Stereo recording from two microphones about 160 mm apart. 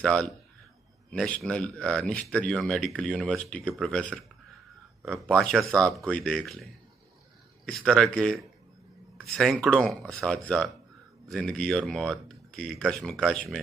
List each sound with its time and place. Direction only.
0.0 s speech: 5° left (ahead or behind)
5.2 s speech: 5° left (ahead or behind)